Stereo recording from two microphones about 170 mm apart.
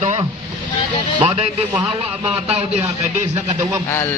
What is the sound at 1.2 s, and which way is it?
Speech, 40° right (ahead or behind).